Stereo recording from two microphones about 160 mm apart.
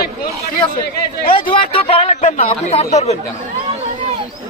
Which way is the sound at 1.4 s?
35° left (ahead or behind).